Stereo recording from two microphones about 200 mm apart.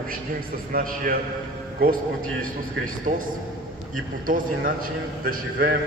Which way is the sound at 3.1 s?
45° right (ahead or behind).